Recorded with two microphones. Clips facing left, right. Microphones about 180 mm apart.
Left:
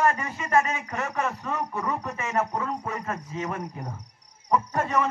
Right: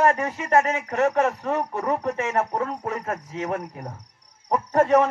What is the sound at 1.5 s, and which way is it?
Speech, 70° right (ahead or behind).